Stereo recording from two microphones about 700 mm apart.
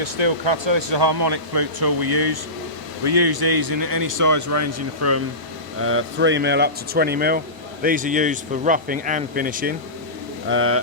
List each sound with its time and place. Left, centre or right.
0.0 s speech: right; by 10.8 s centre